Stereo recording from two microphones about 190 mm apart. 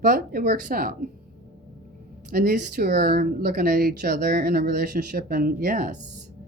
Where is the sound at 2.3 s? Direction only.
50° right (ahead or behind).